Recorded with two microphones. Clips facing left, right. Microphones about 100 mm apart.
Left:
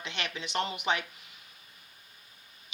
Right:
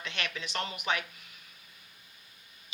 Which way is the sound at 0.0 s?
25° left (ahead or behind).